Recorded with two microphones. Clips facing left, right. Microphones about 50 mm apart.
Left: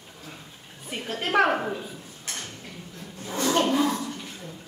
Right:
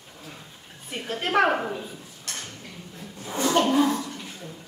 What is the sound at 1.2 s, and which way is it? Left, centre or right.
Speech, centre.